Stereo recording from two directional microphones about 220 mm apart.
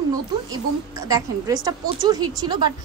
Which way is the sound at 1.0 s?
15° right (ahead or behind).